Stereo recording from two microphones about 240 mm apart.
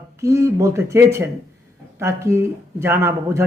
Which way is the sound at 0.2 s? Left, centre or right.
Centre.